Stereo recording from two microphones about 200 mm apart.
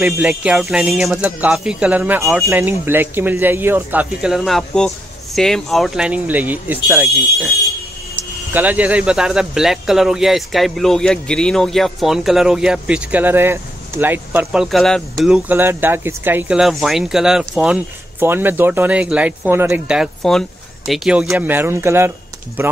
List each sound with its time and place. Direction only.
0.0 s speech: 10° right (ahead or behind)